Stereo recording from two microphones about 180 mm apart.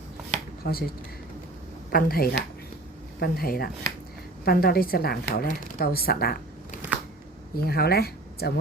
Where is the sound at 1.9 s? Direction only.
55° left (ahead or behind).